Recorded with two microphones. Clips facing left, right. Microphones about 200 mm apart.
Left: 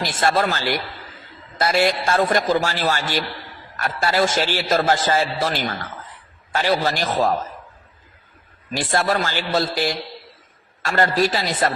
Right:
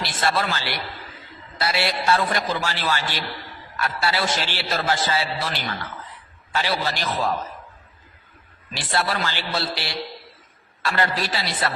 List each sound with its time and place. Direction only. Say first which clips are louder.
0.0 s a man's voice: left 4 dB; 45° left (ahead or behind)
8.7 s a man's voice: left 5 dB; 45° left (ahead or behind)